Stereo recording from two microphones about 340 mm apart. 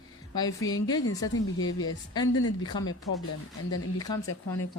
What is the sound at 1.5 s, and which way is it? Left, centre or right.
Speech, left.